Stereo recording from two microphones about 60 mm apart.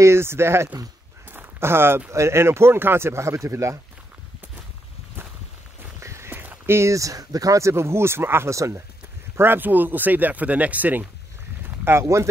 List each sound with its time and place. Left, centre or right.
0.0 s speech: right
5.9 s walk: right
6.3 s a sound: right
6.7 s speech: right
8.5 s speech: right
9.4 s speech: right
12.0 s speech: right